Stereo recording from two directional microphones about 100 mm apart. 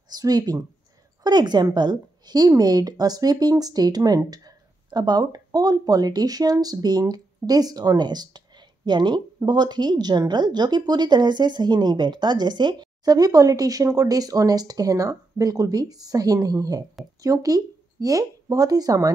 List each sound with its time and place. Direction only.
0.1 s a woman's voice: 40° right (ahead or behind)